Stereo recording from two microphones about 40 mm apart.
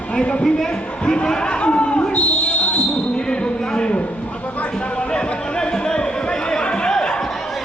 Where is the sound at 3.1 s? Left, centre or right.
Left.